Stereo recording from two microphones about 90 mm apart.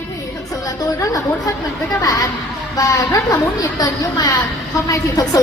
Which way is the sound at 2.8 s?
40° left (ahead or behind).